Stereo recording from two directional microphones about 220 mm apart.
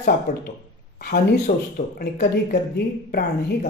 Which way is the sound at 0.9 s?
35° left (ahead or behind).